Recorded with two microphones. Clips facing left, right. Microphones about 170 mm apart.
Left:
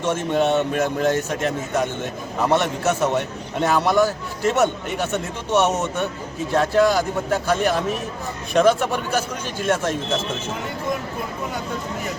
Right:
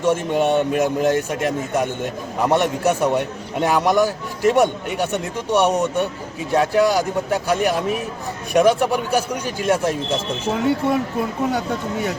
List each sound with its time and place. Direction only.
0.0 s a man's voice: 15° right (ahead or behind)